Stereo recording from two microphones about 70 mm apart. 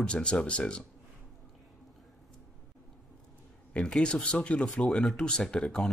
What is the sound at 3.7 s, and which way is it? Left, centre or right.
Speech, centre.